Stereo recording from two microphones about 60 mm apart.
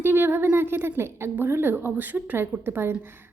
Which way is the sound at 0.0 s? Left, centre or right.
Right.